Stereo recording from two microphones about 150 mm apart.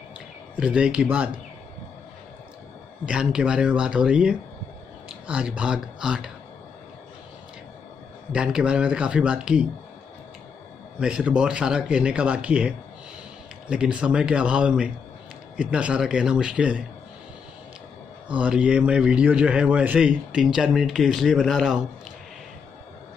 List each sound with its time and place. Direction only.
0.6 s speech: 5° right (ahead or behind)
3.1 s a man's voice: 5° right (ahead or behind)
8.3 s speech: 5° right (ahead or behind)
11.0 s speech: 5° right (ahead or behind)
18.3 s a man's voice: 5° right (ahead or behind)